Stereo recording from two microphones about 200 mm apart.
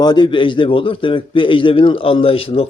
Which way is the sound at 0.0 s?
20° left (ahead or behind).